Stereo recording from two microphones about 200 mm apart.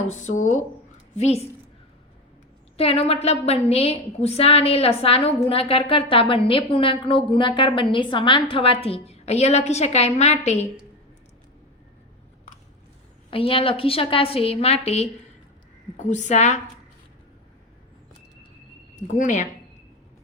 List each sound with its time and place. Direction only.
0.1 s a woman's voice: 35° left (ahead or behind)
2.7 s a woman's voice: 30° left (ahead or behind)
13.3 s a woman's voice: 25° left (ahead or behind)
18.9 s a woman's voice: 35° left (ahead or behind)